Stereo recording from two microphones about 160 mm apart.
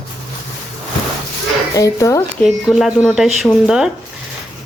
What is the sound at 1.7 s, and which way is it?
Speech, 20° left (ahead or behind).